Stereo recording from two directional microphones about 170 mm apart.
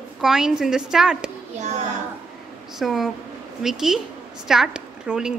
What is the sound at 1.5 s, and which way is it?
Speech, 45° right (ahead or behind).